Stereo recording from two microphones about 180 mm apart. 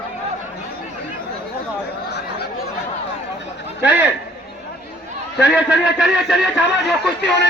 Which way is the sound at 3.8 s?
10° right (ahead or behind).